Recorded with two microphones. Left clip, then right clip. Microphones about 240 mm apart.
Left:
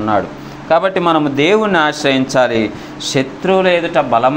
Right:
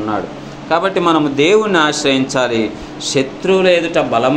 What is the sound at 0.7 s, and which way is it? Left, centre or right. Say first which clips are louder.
A man's voice: left 1 dB; left.